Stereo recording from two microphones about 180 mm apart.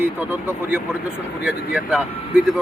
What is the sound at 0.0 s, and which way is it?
Speech, 10° right (ahead or behind).